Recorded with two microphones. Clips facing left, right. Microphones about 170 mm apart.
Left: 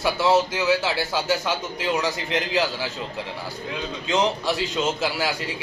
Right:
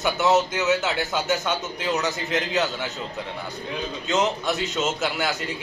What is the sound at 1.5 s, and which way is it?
A man's voice, centre (ahead or behind).